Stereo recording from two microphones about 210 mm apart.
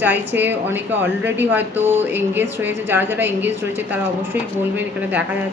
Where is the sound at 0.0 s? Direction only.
10° right (ahead or behind).